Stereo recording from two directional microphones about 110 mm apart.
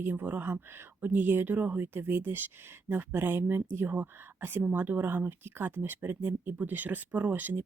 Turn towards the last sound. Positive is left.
turn(degrees=-15)  # may be behind; listen again after turning